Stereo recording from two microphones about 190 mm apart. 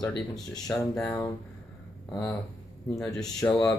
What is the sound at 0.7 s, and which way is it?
Speech, 5° left (ahead or behind).